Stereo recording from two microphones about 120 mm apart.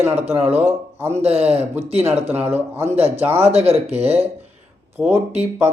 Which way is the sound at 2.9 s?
55° right (ahead or behind).